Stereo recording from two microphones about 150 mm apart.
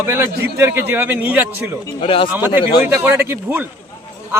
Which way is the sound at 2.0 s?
35° left (ahead or behind).